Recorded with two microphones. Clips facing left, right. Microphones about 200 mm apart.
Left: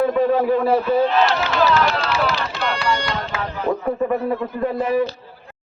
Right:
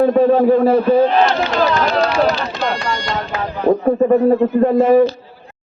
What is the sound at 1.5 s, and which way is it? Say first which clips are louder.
Run: right 2 dB; 45° right (ahead or behind).